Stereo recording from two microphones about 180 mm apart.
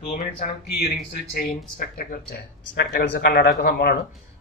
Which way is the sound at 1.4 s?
50° left (ahead or behind).